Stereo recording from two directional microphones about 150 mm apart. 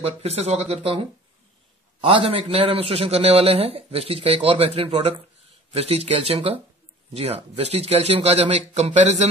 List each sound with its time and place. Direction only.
0.0 s a man's voice: 45° right (ahead or behind)